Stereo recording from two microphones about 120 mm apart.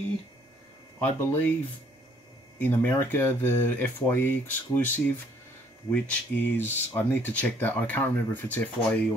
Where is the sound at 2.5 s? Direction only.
15° left (ahead or behind).